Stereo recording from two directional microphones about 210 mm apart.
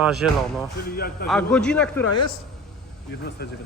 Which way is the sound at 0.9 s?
45° left (ahead or behind).